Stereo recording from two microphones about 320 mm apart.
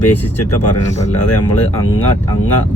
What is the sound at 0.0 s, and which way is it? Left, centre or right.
Speech, left.